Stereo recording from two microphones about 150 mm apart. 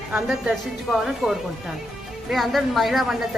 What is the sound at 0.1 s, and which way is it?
A woman's voice, 5° right (ahead or behind).